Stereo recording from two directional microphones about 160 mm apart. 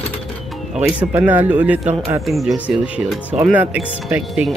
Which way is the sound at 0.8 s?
10° right (ahead or behind).